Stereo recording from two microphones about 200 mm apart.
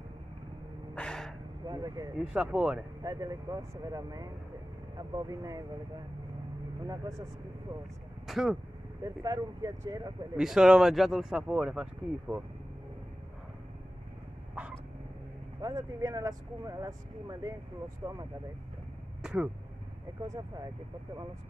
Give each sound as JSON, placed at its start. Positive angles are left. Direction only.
{"t": 0.9, "sound": "gasp", "side_deg": 5}
{"t": 1.7, "sound": "a sound", "side_deg": -20}
{"t": 2.1, "sound": "speech", "side_deg": -5}
{"t": 3.0, "sound": "speech", "side_deg": -20}
{"t": 8.3, "sound": "speech", "side_deg": 0}
{"t": 9.0, "sound": "speech", "side_deg": -20}
{"t": 10.3, "sound": "speech", "side_deg": 0}
{"t": 15.6, "sound": "speech", "side_deg": -20}
{"t": 19.2, "sound": "speech", "side_deg": -5}
{"t": 20.2, "sound": "speech", "side_deg": -20}